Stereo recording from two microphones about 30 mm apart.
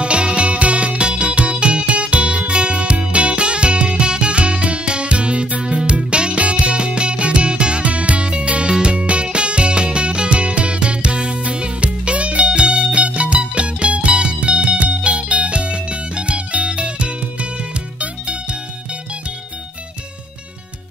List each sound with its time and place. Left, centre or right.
0.0 s music: right
7.8 s music: right